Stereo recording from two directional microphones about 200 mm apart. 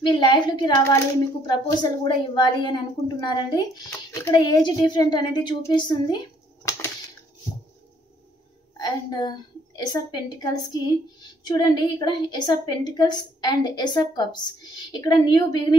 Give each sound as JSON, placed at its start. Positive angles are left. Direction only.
{"t": 0.0, "sound": "a woman's voice", "side_deg": 25}
{"t": 8.7, "sound": "a woman's voice", "side_deg": 20}